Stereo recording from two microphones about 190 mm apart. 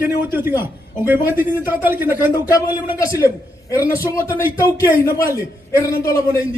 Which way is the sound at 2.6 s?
15° left (ahead or behind).